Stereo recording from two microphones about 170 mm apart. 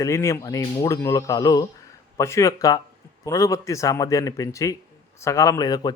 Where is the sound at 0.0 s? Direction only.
15° left (ahead or behind).